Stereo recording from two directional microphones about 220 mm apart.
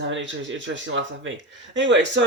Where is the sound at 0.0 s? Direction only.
60° right (ahead or behind).